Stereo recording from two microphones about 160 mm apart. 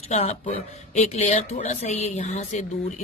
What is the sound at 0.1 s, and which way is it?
Speech, 40° left (ahead or behind).